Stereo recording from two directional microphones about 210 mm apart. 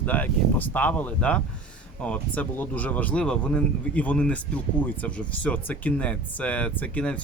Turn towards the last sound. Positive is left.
turn(degrees=5)  # may be behind; listen again after turning